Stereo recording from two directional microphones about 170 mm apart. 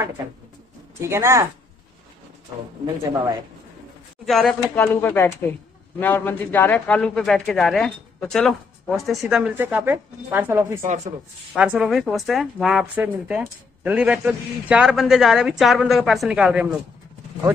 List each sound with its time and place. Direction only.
1.0 s speech: 15° right (ahead or behind)
4.3 s a woman's voice: 5° left (ahead or behind)